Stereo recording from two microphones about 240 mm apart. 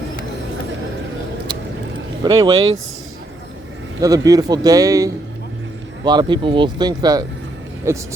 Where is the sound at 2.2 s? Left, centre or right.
Centre.